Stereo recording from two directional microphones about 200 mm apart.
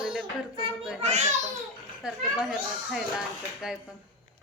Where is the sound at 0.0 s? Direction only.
5° right (ahead or behind).